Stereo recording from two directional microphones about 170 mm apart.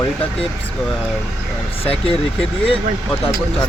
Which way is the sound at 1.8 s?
35° left (ahead or behind).